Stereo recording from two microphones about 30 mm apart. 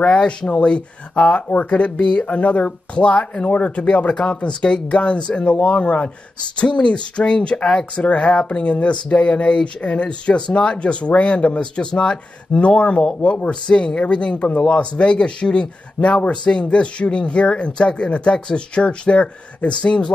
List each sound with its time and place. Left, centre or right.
0.5 s speech: left
12.5 s speech: left
16.0 s speech: left